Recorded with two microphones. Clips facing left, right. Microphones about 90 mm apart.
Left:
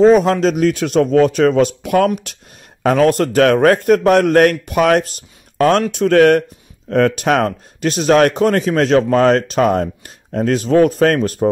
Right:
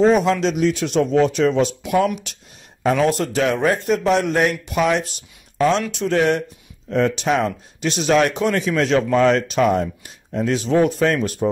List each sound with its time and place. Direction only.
0.0 s a man's voice: 45° left (ahead or behind)